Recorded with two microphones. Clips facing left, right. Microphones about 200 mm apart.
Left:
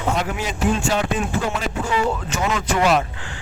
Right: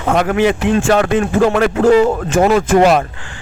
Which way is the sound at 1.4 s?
80° right.